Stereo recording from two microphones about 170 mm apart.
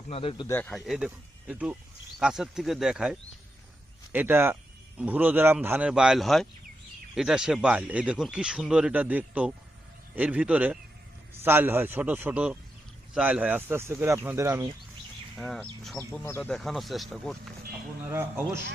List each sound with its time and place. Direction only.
0.1 s speech: 35° left (ahead or behind)
0.4 s speech: 10° left (ahead or behind)
0.7 s speech: 5° right (ahead or behind)
15.4 s speech: 5° left (ahead or behind)
16.5 s speech: centre (ahead or behind)
18.1 s speech: 15° right (ahead or behind)